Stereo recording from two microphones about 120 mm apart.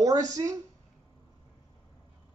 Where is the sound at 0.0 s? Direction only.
30° right (ahead or behind).